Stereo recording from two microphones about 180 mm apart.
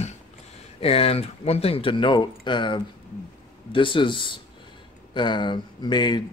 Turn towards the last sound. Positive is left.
turn(degrees=25)  # may be behind; listen again after turning